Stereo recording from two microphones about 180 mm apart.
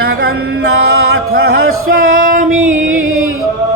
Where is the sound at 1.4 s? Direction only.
60° right (ahead or behind).